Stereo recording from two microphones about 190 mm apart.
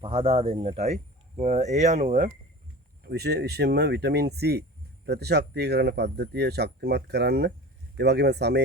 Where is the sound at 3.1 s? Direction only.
60° right (ahead or behind).